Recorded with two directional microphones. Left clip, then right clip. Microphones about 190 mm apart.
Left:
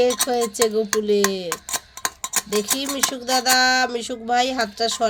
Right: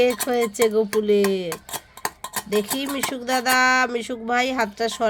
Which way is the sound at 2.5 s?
5° right (ahead or behind).